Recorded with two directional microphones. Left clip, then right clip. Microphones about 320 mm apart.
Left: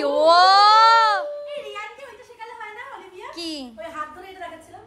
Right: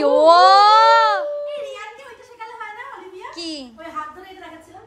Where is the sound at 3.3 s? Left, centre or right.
Centre.